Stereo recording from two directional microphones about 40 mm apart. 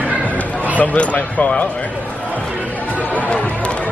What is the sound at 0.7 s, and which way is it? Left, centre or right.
Speech, left.